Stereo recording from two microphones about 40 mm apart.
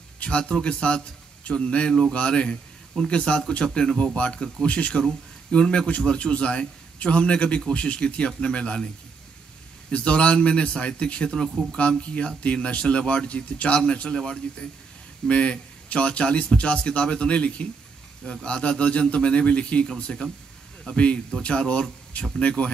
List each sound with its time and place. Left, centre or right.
0.2 s a man's voice: left
9.8 s a man's voice: left
11.2 s speech: centre
12.0 s a man's voice: left